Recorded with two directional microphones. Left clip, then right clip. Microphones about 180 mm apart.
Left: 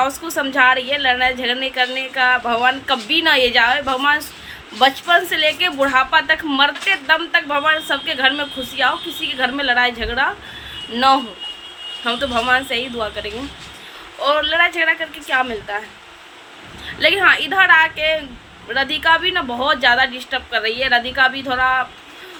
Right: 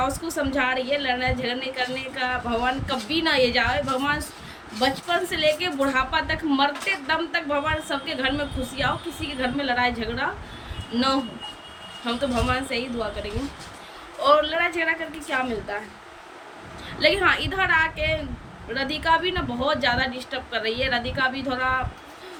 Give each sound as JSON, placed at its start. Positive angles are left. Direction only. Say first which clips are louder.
{"t": 0.0, "sound": "speech", "louder": "left 6 dB", "side_deg": -5}
{"t": 16.8, "sound": "speech", "louder": "left 6 dB", "side_deg": -10}